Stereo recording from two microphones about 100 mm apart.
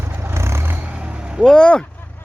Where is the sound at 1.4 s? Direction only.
5° left (ahead or behind).